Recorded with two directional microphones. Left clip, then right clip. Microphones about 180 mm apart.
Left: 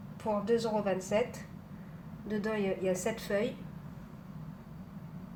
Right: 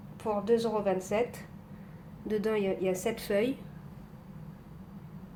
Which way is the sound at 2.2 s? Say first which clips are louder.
Right 4 dB; 45° right (ahead or behind).